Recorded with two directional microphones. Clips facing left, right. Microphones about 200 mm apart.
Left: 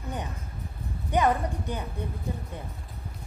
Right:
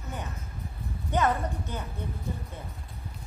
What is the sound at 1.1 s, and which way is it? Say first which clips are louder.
Speech: left 2 dB; 15° left (ahead or behind).